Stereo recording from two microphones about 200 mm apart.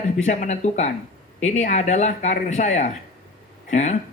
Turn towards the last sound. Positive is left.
turn(degrees=35)  # may be behind; listen again after turning